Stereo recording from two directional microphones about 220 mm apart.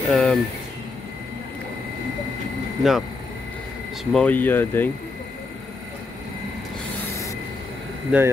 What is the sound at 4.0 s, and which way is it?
Speech, 5° left (ahead or behind).